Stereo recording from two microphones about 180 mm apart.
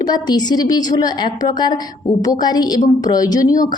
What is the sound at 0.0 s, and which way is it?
A woman's voice, 20° left (ahead or behind).